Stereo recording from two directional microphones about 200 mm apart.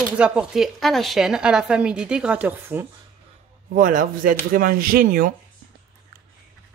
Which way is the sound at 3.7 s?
40° right (ahead or behind).